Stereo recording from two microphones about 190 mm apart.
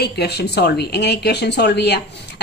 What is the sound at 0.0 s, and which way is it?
Speech, 60° left (ahead or behind).